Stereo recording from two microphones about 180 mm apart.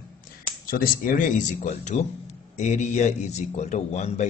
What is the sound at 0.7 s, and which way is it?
Speech, 55° left (ahead or behind).